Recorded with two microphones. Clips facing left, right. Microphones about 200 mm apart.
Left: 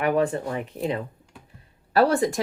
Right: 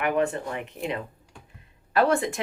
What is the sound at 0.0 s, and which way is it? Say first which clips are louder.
Speech: left 2 dB; 35° left (ahead or behind).